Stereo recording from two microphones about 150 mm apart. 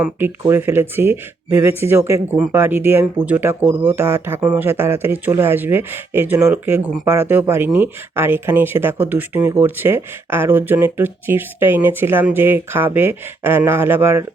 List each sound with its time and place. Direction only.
0.0 s speech: 15° right (ahead or behind)